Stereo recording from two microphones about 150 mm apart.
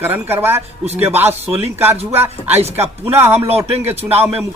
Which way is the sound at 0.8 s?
45° right (ahead or behind).